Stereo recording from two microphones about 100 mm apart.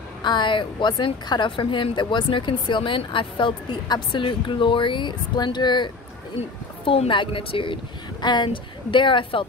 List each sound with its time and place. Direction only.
0.2 s speech: 50° left (ahead or behind)
6.8 s a woman's voice: 65° left (ahead or behind)